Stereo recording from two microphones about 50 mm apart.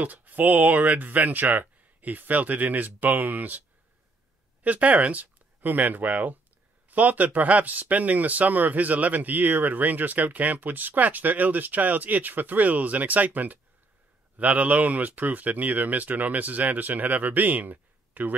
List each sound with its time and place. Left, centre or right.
0.0 s speech: right
4.6 s speech: right